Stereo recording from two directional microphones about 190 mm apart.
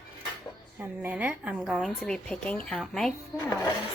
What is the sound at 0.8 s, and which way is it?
A woman's voice, 10° right (ahead or behind).